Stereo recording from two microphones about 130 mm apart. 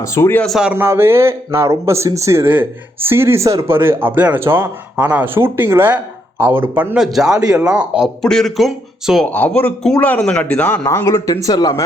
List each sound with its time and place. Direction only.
0.0 s speech: 20° left (ahead or behind)
0.4 s speech: centre (ahead or behind)
0.7 s speech: 15° right (ahead or behind)
7.3 s speech: 30° right (ahead or behind)
7.6 s speech: 5° right (ahead or behind)
9.3 s speech: 10° left (ahead or behind)
10.8 s speech: 25° left (ahead or behind)